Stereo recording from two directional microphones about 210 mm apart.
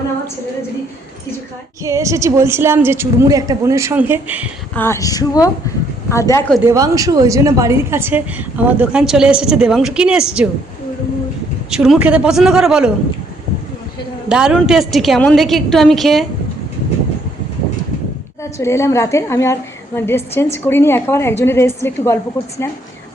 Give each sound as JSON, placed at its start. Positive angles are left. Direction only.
{"t": 1.8, "sound": "a woman's voice", "side_deg": -15}
{"t": 4.7, "sound": "a woman's voice", "side_deg": 10}
{"t": 6.5, "sound": "a woman's voice", "side_deg": -10}
{"t": 11.7, "sound": "a woman's voice", "side_deg": -5}
{"t": 14.3, "sound": "a woman's voice", "side_deg": -5}
{"t": 18.5, "sound": "a woman's voice", "side_deg": 15}